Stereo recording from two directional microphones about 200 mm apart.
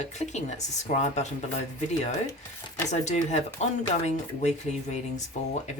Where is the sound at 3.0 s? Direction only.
35° left (ahead or behind).